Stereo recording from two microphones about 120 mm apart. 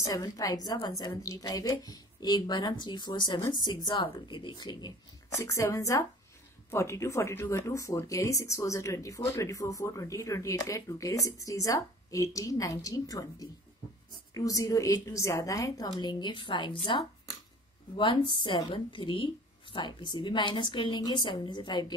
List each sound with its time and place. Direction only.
0.0 s a woman's voice: 30° left (ahead or behind)
5.5 s a woman's voice: 25° left (ahead or behind)